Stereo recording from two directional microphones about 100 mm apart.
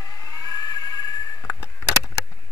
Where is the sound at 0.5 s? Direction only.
35° left (ahead or behind).